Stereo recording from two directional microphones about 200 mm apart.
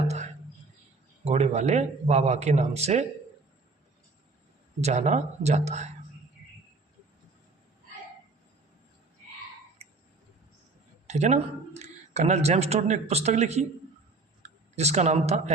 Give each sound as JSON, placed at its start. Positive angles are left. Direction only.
{"t": 1.2, "sound": "speech", "side_deg": -35}
{"t": 4.8, "sound": "speech", "side_deg": -35}
{"t": 11.0, "sound": "speech", "side_deg": -35}